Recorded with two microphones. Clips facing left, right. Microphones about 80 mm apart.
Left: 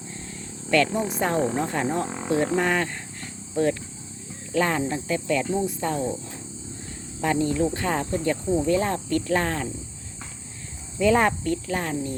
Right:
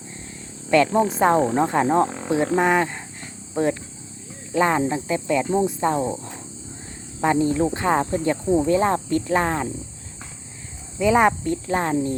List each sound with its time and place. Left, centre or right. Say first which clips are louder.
0.7 s speech: right 5 dB; right
2.0 s speech: even; centre
2.6 s speech: right 5 dB; right
6.0 s speech: right 3 dB; right
7.2 s speech: right 3 dB; right
11.0 s speech: right 3 dB; centre